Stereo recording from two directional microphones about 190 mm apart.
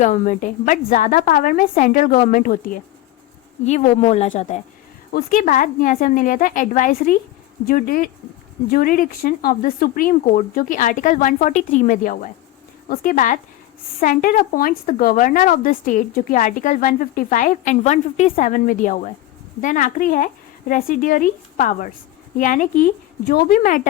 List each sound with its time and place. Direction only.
0.0 s speech: 40° left (ahead or behind)
3.6 s speech: 35° left (ahead or behind)